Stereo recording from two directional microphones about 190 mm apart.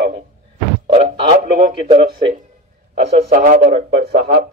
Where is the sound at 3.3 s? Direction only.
45° right (ahead or behind).